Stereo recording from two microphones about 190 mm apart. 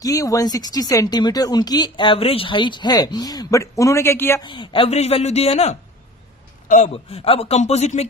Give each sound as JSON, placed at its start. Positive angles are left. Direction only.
{"t": 0.0, "sound": "speech", "side_deg": 20}
{"t": 4.5, "sound": "speech", "side_deg": 25}